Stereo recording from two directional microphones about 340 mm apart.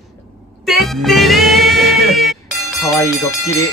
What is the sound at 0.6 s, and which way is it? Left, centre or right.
Speech, centre.